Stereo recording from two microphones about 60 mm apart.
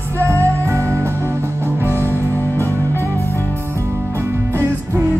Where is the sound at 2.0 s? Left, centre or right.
Left.